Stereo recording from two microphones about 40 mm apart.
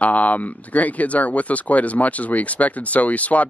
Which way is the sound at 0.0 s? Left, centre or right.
Left.